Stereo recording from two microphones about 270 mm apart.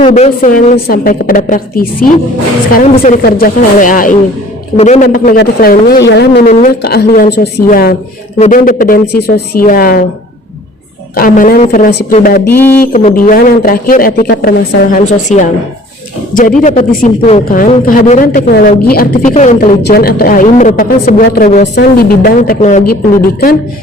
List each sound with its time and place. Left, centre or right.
0.1 s speech: left
2.9 s speech: left
3.2 s speech: left
11.1 s speech: left
12.5 s speech: centre
12.8 s speech: left